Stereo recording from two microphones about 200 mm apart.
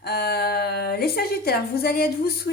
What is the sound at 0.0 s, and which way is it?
A woman's voice, 50° left (ahead or behind).